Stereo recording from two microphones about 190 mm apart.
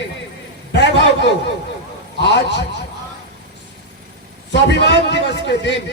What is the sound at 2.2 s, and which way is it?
Speech, 65° left (ahead or behind).